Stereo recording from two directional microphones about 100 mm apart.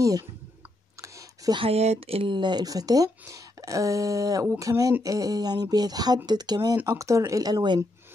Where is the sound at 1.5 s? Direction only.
70° right (ahead or behind).